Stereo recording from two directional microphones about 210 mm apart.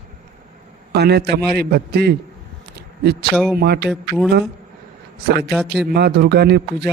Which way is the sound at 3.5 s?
50° right (ahead or behind).